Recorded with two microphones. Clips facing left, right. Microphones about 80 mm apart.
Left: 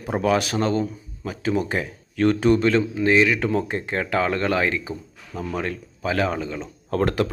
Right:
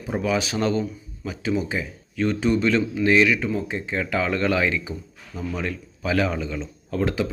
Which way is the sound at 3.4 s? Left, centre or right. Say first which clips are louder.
Left 3 dB; left.